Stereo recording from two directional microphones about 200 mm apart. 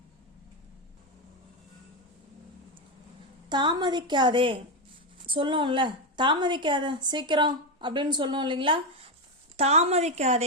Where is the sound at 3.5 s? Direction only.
20° right (ahead or behind).